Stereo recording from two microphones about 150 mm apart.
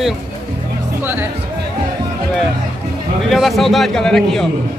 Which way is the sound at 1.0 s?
15° right (ahead or behind).